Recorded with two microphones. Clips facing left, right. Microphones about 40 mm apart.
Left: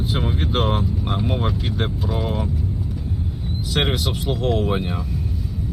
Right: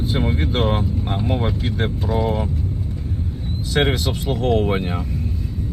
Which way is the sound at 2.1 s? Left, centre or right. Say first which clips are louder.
Right 7 dB; left.